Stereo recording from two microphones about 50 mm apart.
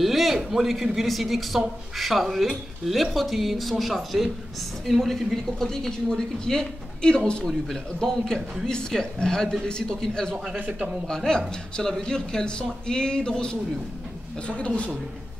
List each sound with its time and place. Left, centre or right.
0.0 s speech: centre
7.4 s speech: centre
10.5 s a man's voice: right
11.1 s a man's voice: centre